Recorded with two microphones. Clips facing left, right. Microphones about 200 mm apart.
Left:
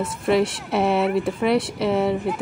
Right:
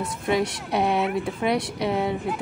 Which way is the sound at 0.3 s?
Centre (ahead or behind).